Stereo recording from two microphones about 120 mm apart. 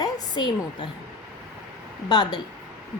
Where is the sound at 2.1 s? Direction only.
35° left (ahead or behind).